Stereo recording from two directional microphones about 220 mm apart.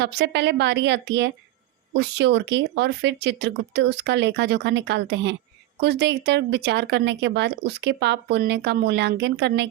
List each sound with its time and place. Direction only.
0.0 s speech: 50° right (ahead or behind)